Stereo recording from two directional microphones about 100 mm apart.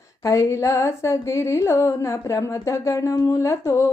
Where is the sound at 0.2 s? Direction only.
35° left (ahead or behind).